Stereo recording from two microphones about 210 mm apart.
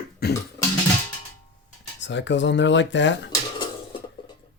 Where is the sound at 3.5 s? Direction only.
20° left (ahead or behind).